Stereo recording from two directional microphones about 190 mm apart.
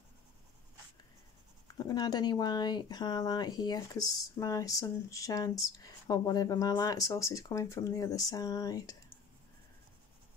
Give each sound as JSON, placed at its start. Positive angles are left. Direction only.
{"t": 1.8, "sound": "speech", "side_deg": 20}